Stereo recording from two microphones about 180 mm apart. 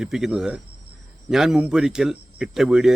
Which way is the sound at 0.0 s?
5° right (ahead or behind).